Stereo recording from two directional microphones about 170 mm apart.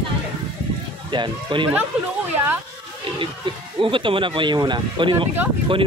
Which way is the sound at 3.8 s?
30° right (ahead or behind).